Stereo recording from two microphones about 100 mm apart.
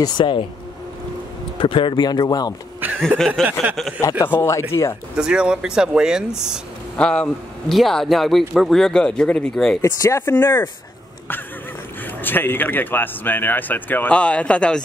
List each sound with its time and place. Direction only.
0.0 s speech: 55° left (ahead or behind)
1.6 s speech: 55° left (ahead or behind); by 2.5 s 40° left (ahead or behind)
3.4 s a man's voice: 5° left (ahead or behind)
4.2 s speech: 25° left (ahead or behind)
5.1 s speech: 10° right (ahead or behind)
7.0 s a man's voice: 10° left (ahead or behind)
9.8 s speech: 30° left (ahead or behind)
12.2 s speech: 20° left (ahead or behind)